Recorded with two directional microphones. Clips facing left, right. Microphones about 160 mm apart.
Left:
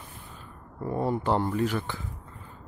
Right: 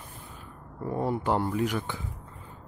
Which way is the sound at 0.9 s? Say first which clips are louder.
Left 1 dB; 10° right (ahead or behind).